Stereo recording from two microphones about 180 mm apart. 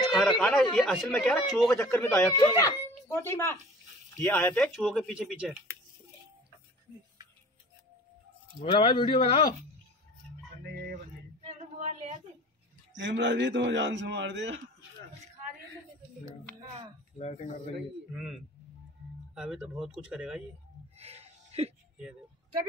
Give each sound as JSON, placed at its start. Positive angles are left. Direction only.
{"t": 0.0, "sound": "speech", "side_deg": 0}
{"t": 1.9, "sound": "speech", "side_deg": 10}
{"t": 8.5, "sound": "speech", "side_deg": 25}
{"t": 11.4, "sound": "a sound", "side_deg": -40}
{"t": 12.9, "sound": "a man's voice", "side_deg": -80}
{"t": 17.2, "sound": "speech", "side_deg": 35}
{"t": 18.1, "sound": "speech", "side_deg": 0}
{"t": 21.0, "sound": "a sound", "side_deg": -35}